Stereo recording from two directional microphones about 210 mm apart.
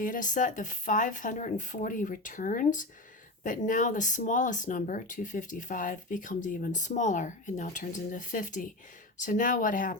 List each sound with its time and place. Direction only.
0.0 s speech: 40° left (ahead or behind)